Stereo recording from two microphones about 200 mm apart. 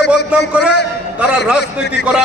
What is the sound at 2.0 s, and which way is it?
Speech, 55° left (ahead or behind).